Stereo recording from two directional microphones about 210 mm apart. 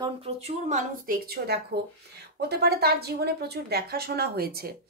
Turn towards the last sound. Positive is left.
turn(degrees=-45)  # may be behind; listen again after turning